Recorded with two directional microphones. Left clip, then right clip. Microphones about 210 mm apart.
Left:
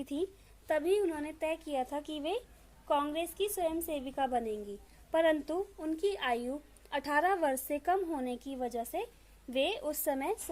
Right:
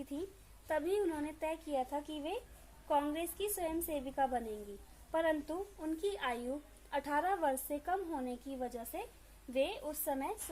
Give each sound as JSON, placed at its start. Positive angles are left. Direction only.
{"t": 0.7, "sound": "a woman's voice", "side_deg": 40}